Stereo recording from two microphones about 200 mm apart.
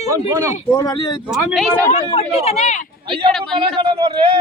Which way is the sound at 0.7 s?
20° left (ahead or behind).